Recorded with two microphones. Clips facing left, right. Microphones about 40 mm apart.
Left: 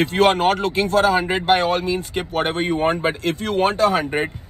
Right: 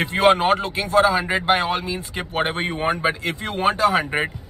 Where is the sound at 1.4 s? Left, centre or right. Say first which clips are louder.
Left 2 dB; right.